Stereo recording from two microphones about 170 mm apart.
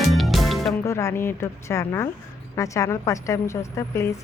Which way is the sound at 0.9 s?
15° left (ahead or behind).